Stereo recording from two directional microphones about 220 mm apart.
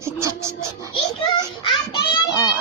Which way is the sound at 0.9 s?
25° left (ahead or behind).